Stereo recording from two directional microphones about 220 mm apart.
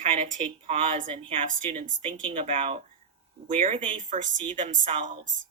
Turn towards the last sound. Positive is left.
turn(degrees=-35)  # may be behind; listen again after turning